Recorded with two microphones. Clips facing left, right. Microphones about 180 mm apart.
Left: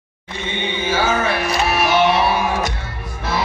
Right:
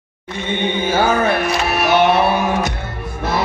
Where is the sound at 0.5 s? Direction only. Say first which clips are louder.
Right 4 dB; 50° right (ahead or behind).